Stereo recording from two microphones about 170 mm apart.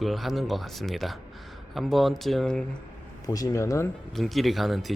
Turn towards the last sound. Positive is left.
turn(degrees=0)  # may be behind; listen again after turning